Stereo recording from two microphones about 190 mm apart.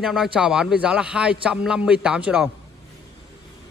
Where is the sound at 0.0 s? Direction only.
Centre (ahead or behind).